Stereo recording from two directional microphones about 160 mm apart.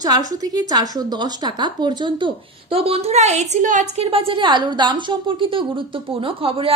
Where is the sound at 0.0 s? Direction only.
25° right (ahead or behind).